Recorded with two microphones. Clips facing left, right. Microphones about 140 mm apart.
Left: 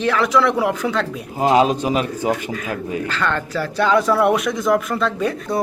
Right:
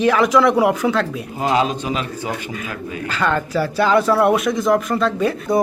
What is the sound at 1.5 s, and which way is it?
Speech, 40° left (ahead or behind).